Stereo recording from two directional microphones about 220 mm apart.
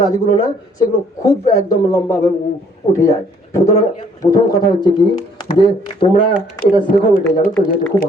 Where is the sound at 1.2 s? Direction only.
15° left (ahead or behind).